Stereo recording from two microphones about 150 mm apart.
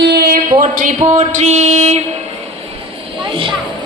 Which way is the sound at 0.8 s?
55° right (ahead or behind).